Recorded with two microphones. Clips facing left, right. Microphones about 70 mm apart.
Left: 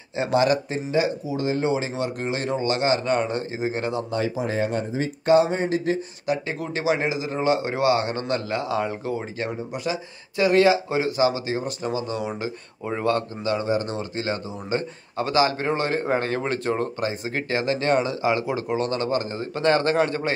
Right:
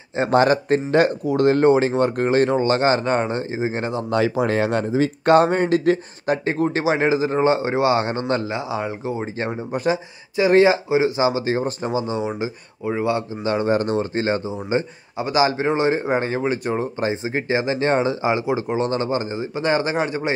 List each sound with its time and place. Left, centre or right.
0.1 s speech: right
4.1 s speech: right
5.3 s speech: right
6.2 s a man's voice: right
10.9 s a man's voice: right
11.4 s a man's voice: right
12.8 s a man's voice: centre
13.4 s speech: right
13.7 s speech: right
13.9 s a man's voice: right
14.8 s a man's voice: centre
17.0 s a man's voice: right